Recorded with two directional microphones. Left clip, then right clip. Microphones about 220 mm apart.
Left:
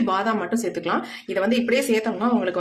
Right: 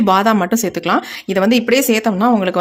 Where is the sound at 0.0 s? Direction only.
50° right (ahead or behind).